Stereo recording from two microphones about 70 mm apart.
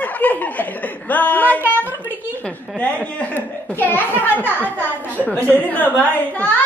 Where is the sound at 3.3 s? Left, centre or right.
Left.